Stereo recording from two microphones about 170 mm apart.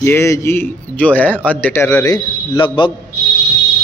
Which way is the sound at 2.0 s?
25° left (ahead or behind).